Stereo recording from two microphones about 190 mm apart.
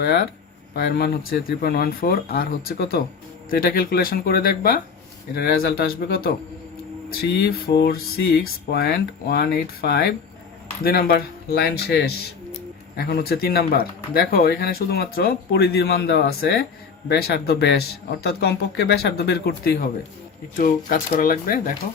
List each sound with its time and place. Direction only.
0.0 s speech: 55° left (ahead or behind)